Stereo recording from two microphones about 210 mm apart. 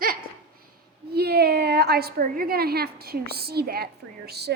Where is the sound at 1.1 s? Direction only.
50° right (ahead or behind).